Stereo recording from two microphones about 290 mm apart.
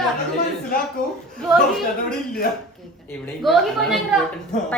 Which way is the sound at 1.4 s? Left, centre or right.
Centre.